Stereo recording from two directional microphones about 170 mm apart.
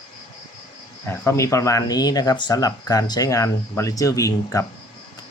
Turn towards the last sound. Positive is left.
turn(degrees=20)  # may be behind; listen again after turning